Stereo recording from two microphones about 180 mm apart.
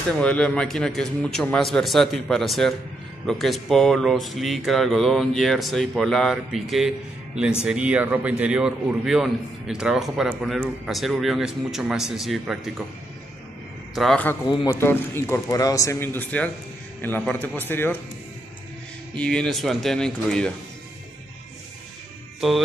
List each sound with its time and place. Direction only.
0.2 s speech: 5° left (ahead or behind)
13.9 s speech: 5° left (ahead or behind)
14.5 s a man's voice: 20° left (ahead or behind)
19.1 s speech: 5° left (ahead or behind)